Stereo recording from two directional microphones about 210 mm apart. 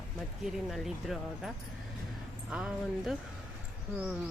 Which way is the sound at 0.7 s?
Centre (ahead or behind).